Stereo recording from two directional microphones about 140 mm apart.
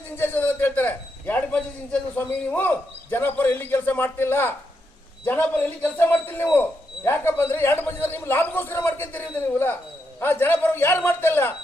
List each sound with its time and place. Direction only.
0.2 s a man's voice: 15° left (ahead or behind)